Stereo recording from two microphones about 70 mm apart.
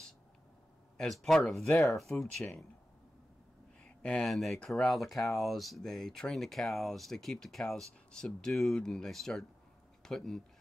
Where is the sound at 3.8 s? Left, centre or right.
Centre.